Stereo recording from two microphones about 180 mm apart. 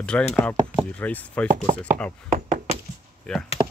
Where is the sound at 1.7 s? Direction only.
45° right (ahead or behind).